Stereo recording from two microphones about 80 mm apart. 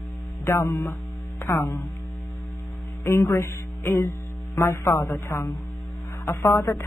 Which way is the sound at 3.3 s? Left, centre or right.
Left.